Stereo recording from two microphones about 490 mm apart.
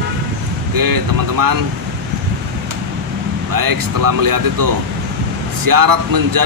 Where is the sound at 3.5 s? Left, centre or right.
Right.